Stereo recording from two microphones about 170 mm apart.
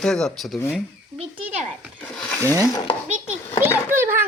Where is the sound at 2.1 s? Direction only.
5° left (ahead or behind).